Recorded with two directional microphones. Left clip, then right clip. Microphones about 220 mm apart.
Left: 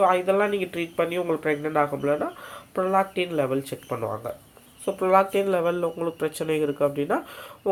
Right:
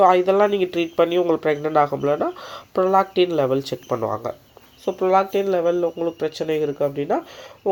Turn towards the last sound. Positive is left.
turn(degrees=-10)  # may be behind; listen again after turning